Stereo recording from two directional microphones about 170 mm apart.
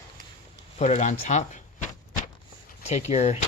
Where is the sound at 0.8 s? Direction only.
40° left (ahead or behind).